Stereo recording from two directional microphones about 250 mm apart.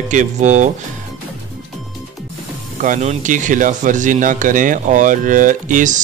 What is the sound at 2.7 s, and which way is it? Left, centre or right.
Speech, right.